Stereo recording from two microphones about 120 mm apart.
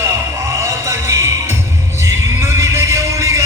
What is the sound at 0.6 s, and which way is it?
Music, 25° right (ahead or behind).